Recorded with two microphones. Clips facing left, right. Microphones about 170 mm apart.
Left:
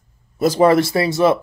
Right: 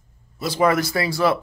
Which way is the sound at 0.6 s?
25° left (ahead or behind).